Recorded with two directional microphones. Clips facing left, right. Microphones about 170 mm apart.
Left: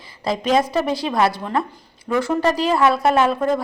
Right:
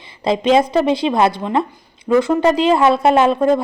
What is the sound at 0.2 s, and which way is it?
Speech, 25° right (ahead or behind).